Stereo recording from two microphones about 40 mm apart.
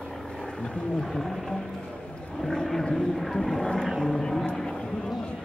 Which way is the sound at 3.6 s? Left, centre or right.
Centre.